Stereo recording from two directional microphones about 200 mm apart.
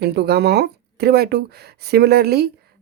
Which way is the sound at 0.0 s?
55° right (ahead or behind).